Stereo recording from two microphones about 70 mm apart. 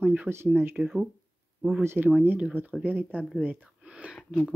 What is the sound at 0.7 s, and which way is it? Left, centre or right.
Speech, centre.